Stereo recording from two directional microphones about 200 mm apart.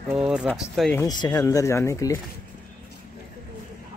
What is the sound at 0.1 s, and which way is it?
Speech, 5° right (ahead or behind).